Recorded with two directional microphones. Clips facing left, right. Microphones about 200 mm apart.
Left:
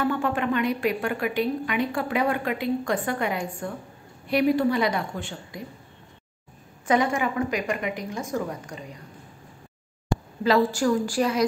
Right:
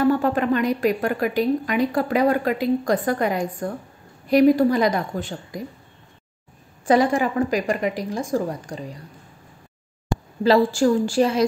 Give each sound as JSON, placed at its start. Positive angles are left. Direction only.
{"t": 0.0, "sound": "a woman's voice", "side_deg": -40}
{"t": 6.9, "sound": "a woman's voice", "side_deg": -35}
{"t": 10.4, "sound": "a woman's voice", "side_deg": -30}